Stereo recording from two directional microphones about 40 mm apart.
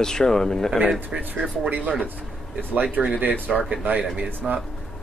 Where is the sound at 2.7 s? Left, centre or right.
Right.